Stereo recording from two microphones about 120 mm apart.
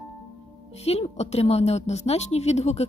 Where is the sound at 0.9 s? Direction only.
60° left (ahead or behind).